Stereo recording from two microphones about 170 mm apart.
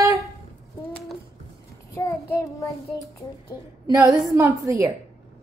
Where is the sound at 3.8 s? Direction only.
20° right (ahead or behind).